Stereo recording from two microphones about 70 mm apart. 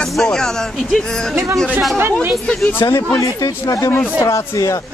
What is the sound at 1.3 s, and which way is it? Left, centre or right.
Speech, right.